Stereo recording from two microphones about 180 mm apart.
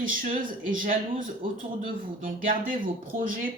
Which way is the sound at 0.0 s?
50° right (ahead or behind).